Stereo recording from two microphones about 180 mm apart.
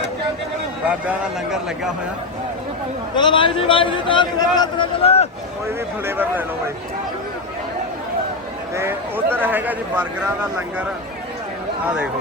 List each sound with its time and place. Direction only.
0.9 s a man's voice: 5° right (ahead or behind)
3.2 s a man's voice: 25° left (ahead or behind)
6.1 s a man's voice: 10° right (ahead or behind)
8.7 s a man's voice: 15° right (ahead or behind)